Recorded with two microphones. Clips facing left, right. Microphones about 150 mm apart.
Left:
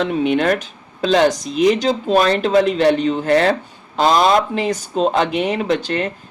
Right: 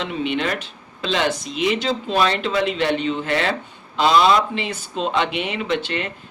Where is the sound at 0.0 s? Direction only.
45° left (ahead or behind).